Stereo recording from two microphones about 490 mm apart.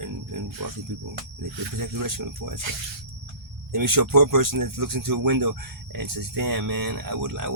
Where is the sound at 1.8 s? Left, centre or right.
Right.